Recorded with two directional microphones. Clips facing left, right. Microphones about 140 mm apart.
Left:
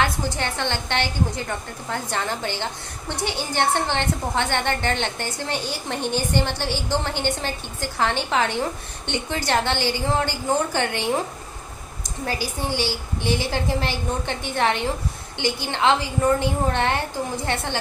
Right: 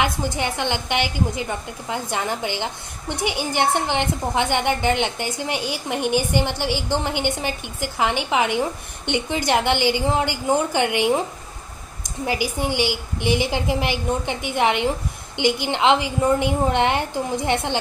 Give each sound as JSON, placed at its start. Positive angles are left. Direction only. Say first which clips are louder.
{"t": 0.0, "sound": "a woman's voice", "louder": "right 1 dB", "side_deg": -15}
{"t": 12.3, "sound": "a woman's voice", "louder": "right 3 dB", "side_deg": -15}